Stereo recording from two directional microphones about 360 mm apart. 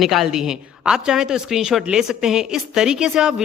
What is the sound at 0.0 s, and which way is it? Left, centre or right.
A woman's voice, centre.